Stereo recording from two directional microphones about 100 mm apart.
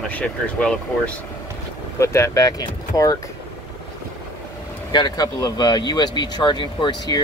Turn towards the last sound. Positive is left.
turn(degrees=50)  # may be behind; listen again after turning